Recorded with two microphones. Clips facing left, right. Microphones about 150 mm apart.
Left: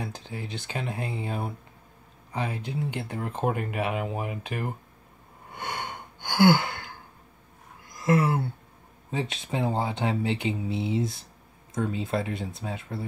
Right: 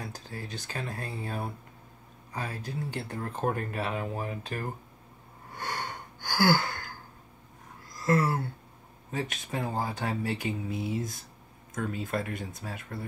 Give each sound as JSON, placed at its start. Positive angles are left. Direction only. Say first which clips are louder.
{"t": 0.0, "sound": "speech", "louder": "left 4 dB", "side_deg": 20}
{"t": 5.5, "sound": "gasp", "louder": "left 1 dB", "side_deg": 20}
{"t": 7.9, "sound": "a sound", "louder": "left 3 dB", "side_deg": 20}
{"t": 9.1, "sound": "speech", "louder": "left 3 dB", "side_deg": 25}